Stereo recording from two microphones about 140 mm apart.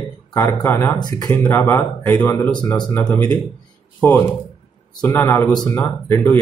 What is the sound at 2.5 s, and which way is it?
Speech, 25° left (ahead or behind).